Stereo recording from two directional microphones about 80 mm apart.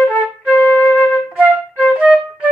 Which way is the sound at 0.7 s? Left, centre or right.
Left.